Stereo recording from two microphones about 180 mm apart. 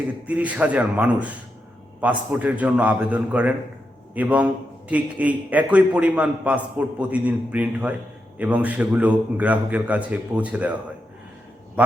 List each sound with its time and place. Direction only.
0.3 s a man's voice: 10° right (ahead or behind)